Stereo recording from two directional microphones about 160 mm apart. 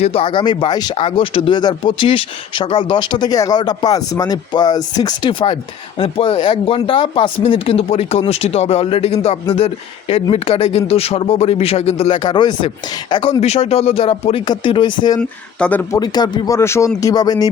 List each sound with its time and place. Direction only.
0.0 s speech: 35° left (ahead or behind)
13.4 s speech: 40° left (ahead or behind)
15.2 s speech: 5° left (ahead or behind)
16.0 s speech: 25° left (ahead or behind)